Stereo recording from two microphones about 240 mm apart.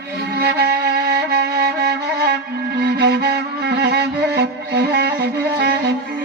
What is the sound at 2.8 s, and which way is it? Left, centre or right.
Music, right.